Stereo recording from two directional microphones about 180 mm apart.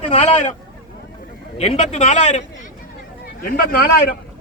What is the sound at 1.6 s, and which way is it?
Speech, 35° left (ahead or behind).